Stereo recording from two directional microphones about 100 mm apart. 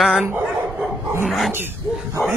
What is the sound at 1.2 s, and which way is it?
Speech, centre (ahead or behind).